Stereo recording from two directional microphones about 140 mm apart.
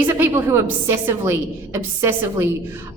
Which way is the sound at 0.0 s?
15° right (ahead or behind).